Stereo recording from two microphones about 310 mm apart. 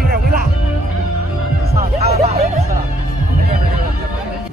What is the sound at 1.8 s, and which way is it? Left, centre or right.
Music, right.